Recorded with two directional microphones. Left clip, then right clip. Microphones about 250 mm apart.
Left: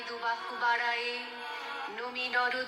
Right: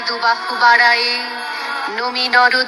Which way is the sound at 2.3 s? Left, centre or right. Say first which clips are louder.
Right 18 dB; right.